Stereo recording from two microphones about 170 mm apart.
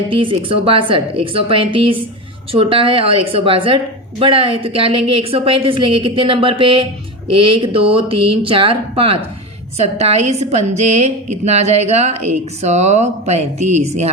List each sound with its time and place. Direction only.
0.1 s a woman's voice: 30° right (ahead or behind)